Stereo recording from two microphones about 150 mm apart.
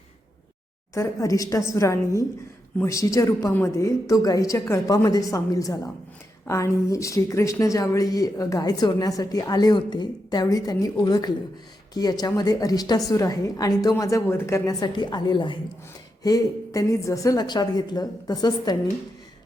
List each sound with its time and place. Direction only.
0.9 s speech: 20° left (ahead or behind)